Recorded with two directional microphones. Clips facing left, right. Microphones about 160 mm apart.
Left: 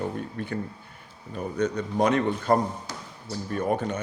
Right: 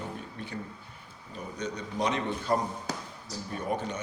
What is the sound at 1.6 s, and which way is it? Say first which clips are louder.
Speech: left 8 dB; 55° left (ahead or behind).